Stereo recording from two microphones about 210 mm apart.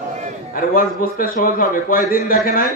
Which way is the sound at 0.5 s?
40° left (ahead or behind).